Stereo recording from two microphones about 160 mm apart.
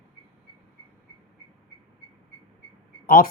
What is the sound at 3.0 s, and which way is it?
Speech, 65° left (ahead or behind).